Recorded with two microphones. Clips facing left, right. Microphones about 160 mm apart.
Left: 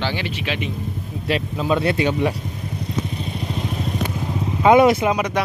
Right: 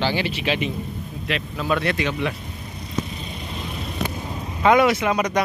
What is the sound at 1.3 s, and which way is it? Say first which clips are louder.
Speech: left 4 dB; 25° left (ahead or behind).